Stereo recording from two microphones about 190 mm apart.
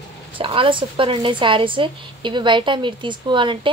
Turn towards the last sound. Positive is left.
turn(degrees=-25)  # may be behind; listen again after turning